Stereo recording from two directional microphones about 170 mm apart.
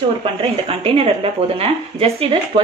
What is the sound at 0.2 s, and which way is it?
Speech, 35° right (ahead or behind).